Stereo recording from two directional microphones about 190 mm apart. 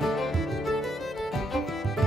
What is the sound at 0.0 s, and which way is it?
Music, centre (ahead or behind).